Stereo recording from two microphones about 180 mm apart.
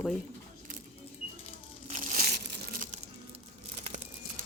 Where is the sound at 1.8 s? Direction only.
40° right (ahead or behind).